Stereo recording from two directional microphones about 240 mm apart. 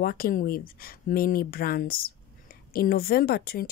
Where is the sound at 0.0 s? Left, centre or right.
Left.